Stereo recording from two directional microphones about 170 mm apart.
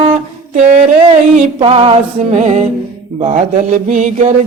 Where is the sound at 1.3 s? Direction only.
35° right (ahead or behind).